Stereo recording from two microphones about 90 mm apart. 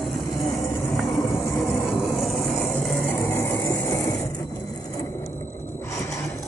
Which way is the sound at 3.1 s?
25° left (ahead or behind).